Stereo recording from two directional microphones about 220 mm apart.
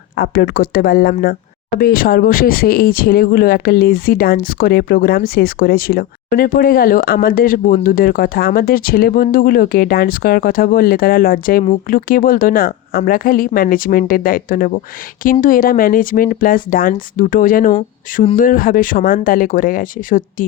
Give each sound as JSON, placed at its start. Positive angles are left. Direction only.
{"t": 0.2, "sound": "speech", "side_deg": 45}